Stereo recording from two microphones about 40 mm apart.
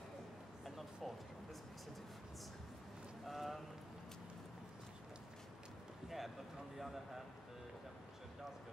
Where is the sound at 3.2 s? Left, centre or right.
Centre.